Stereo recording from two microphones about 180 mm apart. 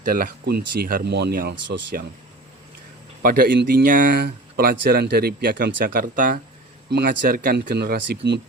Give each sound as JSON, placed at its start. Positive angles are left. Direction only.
{"t": 0.0, "sound": "speech", "side_deg": -55}
{"t": 3.2, "sound": "speech", "side_deg": -55}